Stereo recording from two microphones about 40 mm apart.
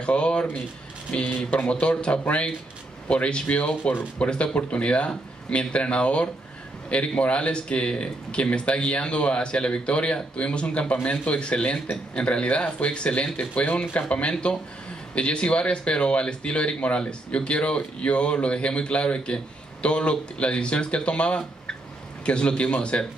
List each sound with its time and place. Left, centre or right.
0.0 s speech: left
14.3 s speech: left